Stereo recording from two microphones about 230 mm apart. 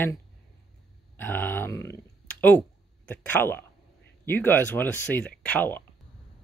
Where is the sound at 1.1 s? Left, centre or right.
Centre.